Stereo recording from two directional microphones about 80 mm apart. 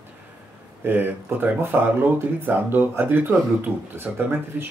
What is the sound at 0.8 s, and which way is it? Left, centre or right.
Speech, right.